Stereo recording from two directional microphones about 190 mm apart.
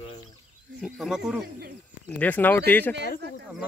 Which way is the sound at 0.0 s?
30° left (ahead or behind).